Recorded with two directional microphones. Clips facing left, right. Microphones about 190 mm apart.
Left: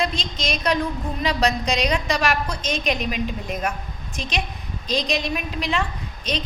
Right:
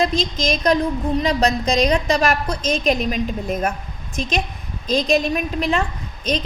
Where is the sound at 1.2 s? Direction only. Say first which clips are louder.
Even; 40° right (ahead or behind).